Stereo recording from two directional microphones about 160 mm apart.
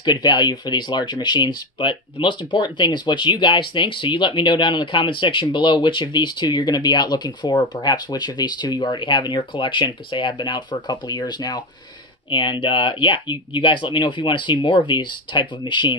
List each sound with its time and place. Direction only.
0.0 s speech: 25° left (ahead or behind)